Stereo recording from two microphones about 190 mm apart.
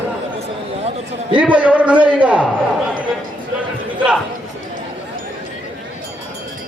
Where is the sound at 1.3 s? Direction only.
5° right (ahead or behind).